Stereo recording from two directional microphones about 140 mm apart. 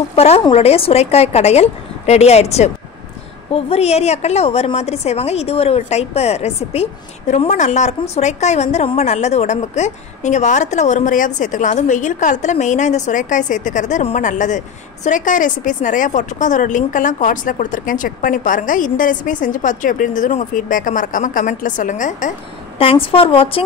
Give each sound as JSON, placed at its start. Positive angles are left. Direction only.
{"t": 0.1, "sound": "a woman's voice", "side_deg": 45}
{"t": 22.8, "sound": "a woman's voice", "side_deg": 40}